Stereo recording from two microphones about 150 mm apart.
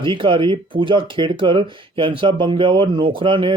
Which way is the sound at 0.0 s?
35° right (ahead or behind).